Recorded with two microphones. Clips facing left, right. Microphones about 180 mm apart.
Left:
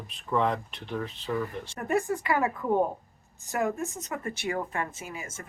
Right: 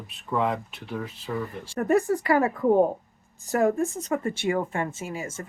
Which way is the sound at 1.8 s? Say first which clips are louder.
Right 5 dB; 40° right (ahead or behind).